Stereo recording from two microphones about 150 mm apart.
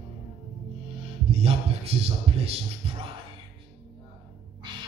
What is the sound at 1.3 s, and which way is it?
A man's voice, 40° right (ahead or behind).